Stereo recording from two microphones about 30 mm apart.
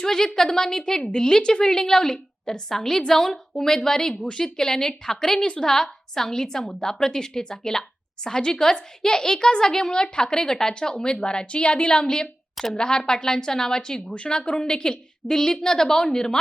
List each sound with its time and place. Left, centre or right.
0.0 s a woman's voice: centre
1.6 s a woman's voice: centre